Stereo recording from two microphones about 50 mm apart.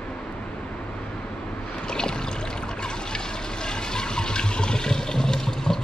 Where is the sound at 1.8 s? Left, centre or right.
Centre.